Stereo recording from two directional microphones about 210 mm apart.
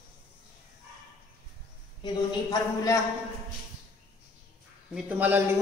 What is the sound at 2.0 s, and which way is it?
Speech, 15° left (ahead or behind).